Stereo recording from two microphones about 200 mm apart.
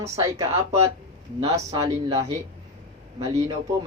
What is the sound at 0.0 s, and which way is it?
Speech, 20° right (ahead or behind).